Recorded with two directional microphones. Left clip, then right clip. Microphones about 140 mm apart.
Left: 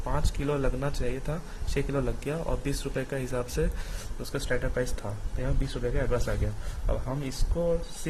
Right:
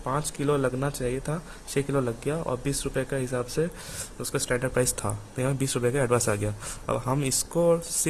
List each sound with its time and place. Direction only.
0.0 s speech: 35° right (ahead or behind)
4.2 s speech: 45° right (ahead or behind)